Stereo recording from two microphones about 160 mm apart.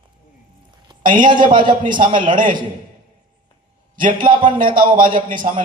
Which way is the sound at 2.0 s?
50° right (ahead or behind).